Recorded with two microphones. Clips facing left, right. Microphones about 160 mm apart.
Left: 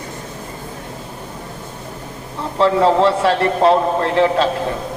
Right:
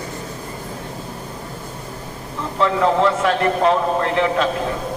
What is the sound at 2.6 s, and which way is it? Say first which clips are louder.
A man's voice: left 3 dB; 35° left (ahead or behind).